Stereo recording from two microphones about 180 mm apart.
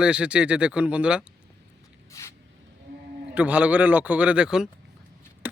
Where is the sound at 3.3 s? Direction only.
10° right (ahead or behind).